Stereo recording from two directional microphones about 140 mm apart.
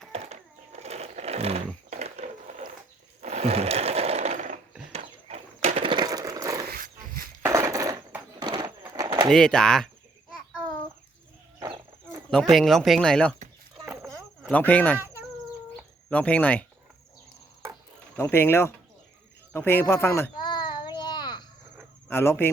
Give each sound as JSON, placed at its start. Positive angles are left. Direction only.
{"t": 0.1, "sound": "a sound", "side_deg": -50}
{"t": 3.2, "sound": "sewing machine", "side_deg": -50}
{"t": 4.9, "sound": "a sound", "side_deg": -50}
{"t": 5.9, "sound": "a sound", "side_deg": -30}
{"t": 6.7, "sound": "dog", "side_deg": -85}
{"t": 7.4, "sound": "a sound", "side_deg": -20}
{"t": 9.3, "sound": "speech", "side_deg": 5}
{"t": 12.3, "sound": "speech", "side_deg": 5}
{"t": 13.8, "sound": "cricket", "side_deg": 0}
{"t": 14.5, "sound": "speech", "side_deg": 10}
{"t": 16.0, "sound": "speech", "side_deg": 10}
{"t": 18.2, "sound": "speech", "side_deg": 15}
{"t": 20.4, "sound": "child singing", "side_deg": 30}
{"t": 22.1, "sound": "speech", "side_deg": 15}